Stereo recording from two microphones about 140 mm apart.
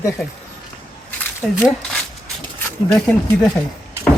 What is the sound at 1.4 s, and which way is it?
Speech, centre (ahead or behind).